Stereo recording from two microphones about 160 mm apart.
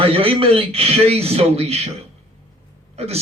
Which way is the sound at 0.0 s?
35° right (ahead or behind).